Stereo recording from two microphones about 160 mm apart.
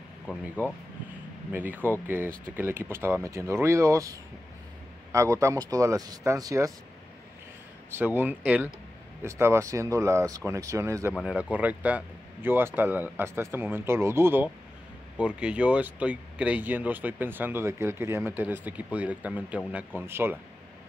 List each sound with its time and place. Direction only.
0.3 s speech: 10° right (ahead or behind)
8.0 s speech: 10° right (ahead or behind)
11.1 s speech: 5° right (ahead or behind)